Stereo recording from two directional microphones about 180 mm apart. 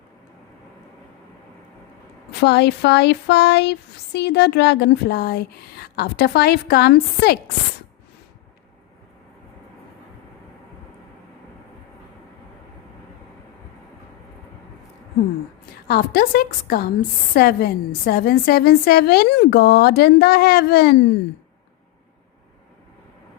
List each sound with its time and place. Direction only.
2.4 s speech: 70° left (ahead or behind)
15.9 s a woman's voice: 55° left (ahead or behind)